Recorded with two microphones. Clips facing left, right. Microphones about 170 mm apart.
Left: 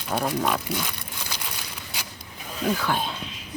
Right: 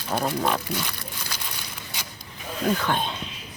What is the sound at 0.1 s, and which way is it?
Speech, centre (ahead or behind).